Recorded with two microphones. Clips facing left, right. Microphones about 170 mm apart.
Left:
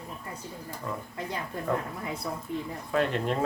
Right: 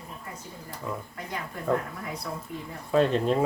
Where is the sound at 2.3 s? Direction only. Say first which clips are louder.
Left 1 dB; 20° left (ahead or behind).